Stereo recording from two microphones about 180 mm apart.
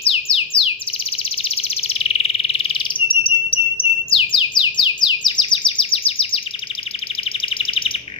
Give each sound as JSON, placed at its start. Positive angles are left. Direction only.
{"t": 0.0, "sound": "bird", "side_deg": 30}
{"t": 7.4, "sound": "chirp", "side_deg": 30}